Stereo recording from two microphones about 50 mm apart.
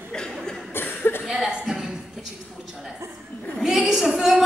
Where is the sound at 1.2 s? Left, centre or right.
Centre.